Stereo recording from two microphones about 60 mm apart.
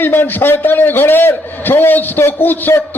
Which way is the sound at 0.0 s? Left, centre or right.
Left.